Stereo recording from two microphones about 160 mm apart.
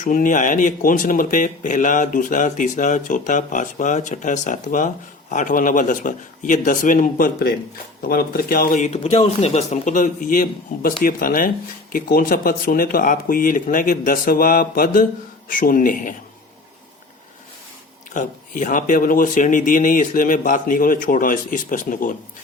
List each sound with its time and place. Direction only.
0.0 s speech: 55° left (ahead or behind)
18.1 s speech: 55° left (ahead or behind)